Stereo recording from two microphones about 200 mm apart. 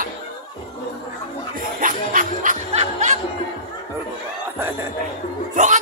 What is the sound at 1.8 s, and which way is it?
Music, 40° right (ahead or behind).